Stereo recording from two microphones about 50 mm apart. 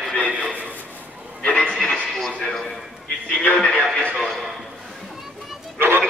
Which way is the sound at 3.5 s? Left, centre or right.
Centre.